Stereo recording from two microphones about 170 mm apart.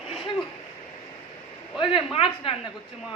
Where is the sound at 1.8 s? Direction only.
35° left (ahead or behind).